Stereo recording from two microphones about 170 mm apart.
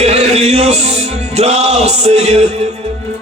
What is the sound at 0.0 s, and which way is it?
Music, 40° right (ahead or behind).